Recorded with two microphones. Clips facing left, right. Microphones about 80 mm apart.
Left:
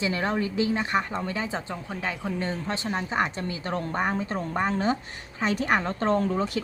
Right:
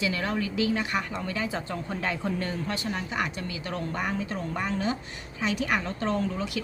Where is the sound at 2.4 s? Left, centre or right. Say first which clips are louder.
Left 1 dB; left.